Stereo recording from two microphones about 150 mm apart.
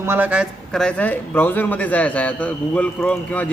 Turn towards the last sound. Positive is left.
turn(degrees=10)  # may be behind; listen again after turning